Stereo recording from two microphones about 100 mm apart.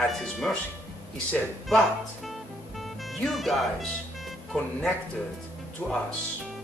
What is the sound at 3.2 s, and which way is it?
Speech, centre (ahead or behind).